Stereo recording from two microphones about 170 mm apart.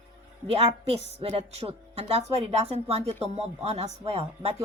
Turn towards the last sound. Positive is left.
turn(degrees=-35)  # may be behind; listen again after turning